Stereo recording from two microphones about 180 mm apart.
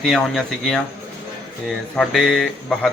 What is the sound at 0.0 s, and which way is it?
Speech, centre (ahead or behind).